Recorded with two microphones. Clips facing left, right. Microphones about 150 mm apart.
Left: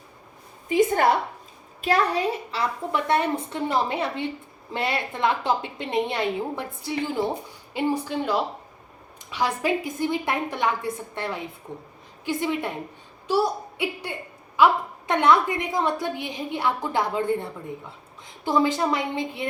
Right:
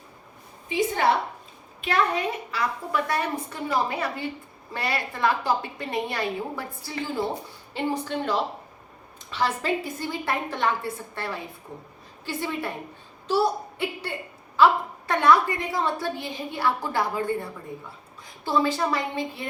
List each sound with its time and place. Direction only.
0.7 s a woman's voice: 50° left (ahead or behind)
1.8 s a woman's voice: 35° left (ahead or behind); by 19.5 s 20° left (ahead or behind)